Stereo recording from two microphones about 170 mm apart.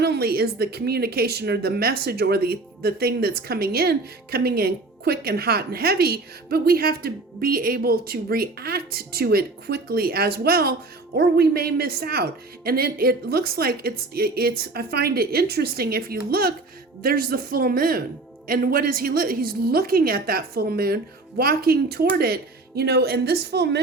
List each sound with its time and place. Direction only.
0.0 s speech: 70° right (ahead or behind)